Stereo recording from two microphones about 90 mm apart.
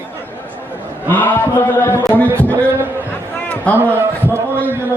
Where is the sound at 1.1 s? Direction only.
20° left (ahead or behind).